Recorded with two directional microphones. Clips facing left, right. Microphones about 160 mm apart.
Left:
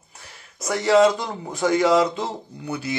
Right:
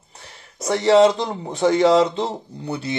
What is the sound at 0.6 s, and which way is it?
A man's voice, 30° right (ahead or behind).